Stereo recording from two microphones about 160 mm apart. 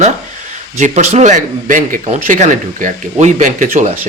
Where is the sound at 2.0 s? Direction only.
45° right (ahead or behind).